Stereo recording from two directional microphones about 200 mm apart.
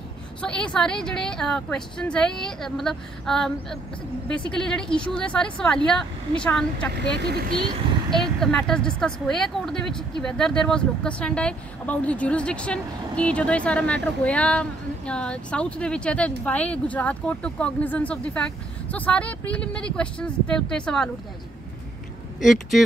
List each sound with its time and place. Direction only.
0.4 s a woman's voice: 5° left (ahead or behind)
7.0 s speech: 55° right (ahead or behind)
8.1 s a woman's voice: centre (ahead or behind)
22.4 s a woman's voice: centre (ahead or behind)